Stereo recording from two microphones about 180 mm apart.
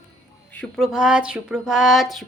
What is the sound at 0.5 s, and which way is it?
Speech, 5° left (ahead or behind).